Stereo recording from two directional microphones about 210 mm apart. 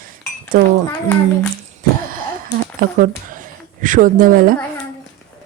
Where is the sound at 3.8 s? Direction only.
40° right (ahead or behind).